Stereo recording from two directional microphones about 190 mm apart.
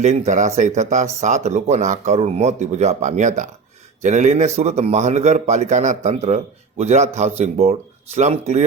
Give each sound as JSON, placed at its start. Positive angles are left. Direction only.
{"t": 0.0, "sound": "a man's voice", "side_deg": -35}